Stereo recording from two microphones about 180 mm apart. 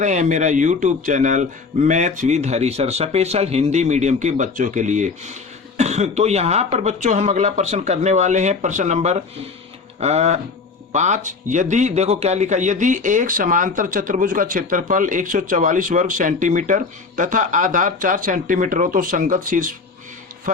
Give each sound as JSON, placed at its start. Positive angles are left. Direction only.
{"t": 0.0, "sound": "a man's voice", "side_deg": -45}